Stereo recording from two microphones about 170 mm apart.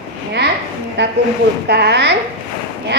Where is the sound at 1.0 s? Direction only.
90° right.